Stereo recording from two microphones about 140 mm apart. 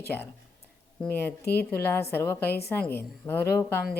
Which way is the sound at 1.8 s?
15° left (ahead or behind).